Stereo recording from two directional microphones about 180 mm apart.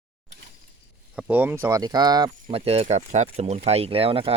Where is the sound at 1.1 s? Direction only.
10° right (ahead or behind).